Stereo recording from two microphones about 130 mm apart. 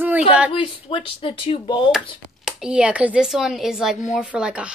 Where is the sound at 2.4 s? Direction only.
5° right (ahead or behind).